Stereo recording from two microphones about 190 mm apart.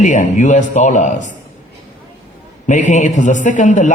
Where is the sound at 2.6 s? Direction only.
40° left (ahead or behind).